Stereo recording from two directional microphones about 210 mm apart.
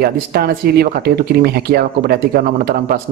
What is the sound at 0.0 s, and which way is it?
Speech, 45° right (ahead or behind).